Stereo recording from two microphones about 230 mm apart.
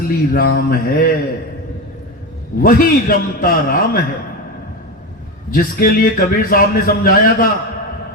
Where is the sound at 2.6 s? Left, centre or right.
Left.